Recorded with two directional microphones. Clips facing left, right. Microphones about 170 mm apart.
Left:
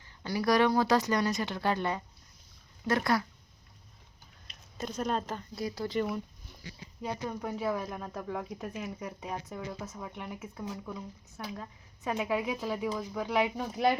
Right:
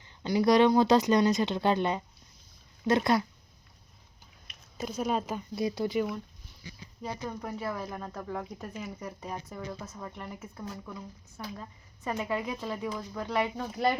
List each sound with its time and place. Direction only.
0.2 s speech: 20° right (ahead or behind)
4.8 s speech: 5° right (ahead or behind)
7.3 s speech: centre (ahead or behind)